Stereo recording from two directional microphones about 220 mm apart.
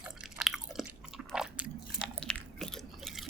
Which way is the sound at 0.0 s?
Centre (ahead or behind).